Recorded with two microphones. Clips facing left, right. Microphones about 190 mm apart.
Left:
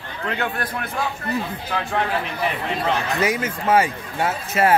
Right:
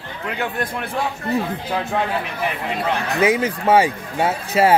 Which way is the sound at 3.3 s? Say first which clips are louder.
Right 6 dB; 30° right (ahead or behind).